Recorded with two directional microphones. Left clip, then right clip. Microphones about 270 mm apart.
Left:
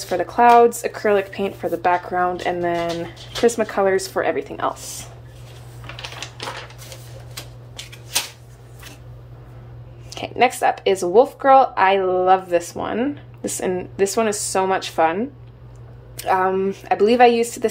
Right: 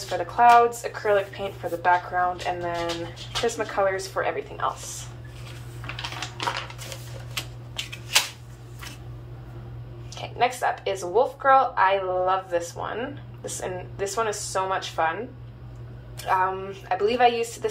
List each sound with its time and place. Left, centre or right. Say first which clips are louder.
0.1 s speech: left 3 dB; left
10.0 s speech: left 6 dB; left
16.2 s speech: left 5 dB; left